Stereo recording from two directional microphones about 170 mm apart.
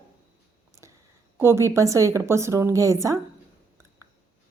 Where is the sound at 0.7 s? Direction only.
15° right (ahead or behind).